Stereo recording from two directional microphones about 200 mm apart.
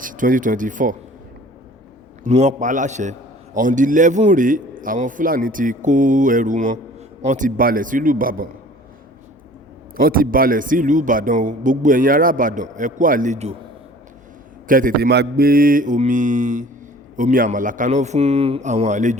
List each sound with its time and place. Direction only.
0.0 s speech: 40° right (ahead or behind)
2.2 s a man's voice: 35° right (ahead or behind)
7.3 s mantra: 40° right (ahead or behind)
10.0 s a man's voice: 45° right (ahead or behind)
14.7 s mantra: 45° right (ahead or behind)
17.2 s a man's voice: 40° right (ahead or behind)